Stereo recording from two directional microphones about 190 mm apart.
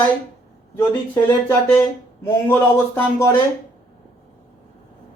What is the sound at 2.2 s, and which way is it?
Speech, 15° left (ahead or behind).